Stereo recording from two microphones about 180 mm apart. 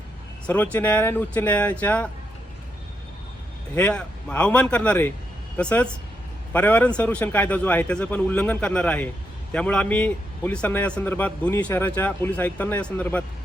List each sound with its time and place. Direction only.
0.4 s a man's voice: 10° left (ahead or behind)
3.8 s a man's voice: 5° left (ahead or behind)